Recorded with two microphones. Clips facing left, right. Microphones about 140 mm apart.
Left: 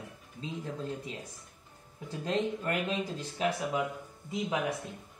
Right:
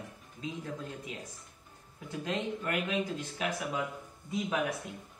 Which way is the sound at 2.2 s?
35° left (ahead or behind).